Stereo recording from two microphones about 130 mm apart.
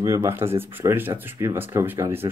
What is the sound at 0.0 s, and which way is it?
Speech, 20° right (ahead or behind).